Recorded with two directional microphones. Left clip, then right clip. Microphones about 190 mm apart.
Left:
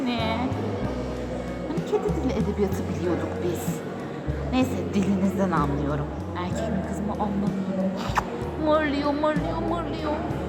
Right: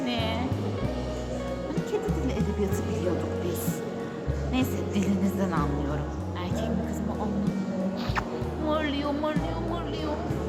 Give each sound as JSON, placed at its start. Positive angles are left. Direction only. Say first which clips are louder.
{"t": 0.0, "sound": "music", "louder": "left 3 dB", "side_deg": 0}
{"t": 4.5, "sound": "a woman's voice", "louder": "left 4 dB", "side_deg": 0}
{"t": 8.7, "sound": "a woman's voice", "louder": "left 6 dB", "side_deg": 5}